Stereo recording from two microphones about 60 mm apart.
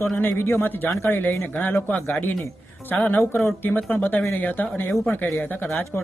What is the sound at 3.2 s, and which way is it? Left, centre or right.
Speech, left.